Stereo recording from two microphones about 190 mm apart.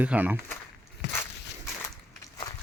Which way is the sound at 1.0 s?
65° left (ahead or behind).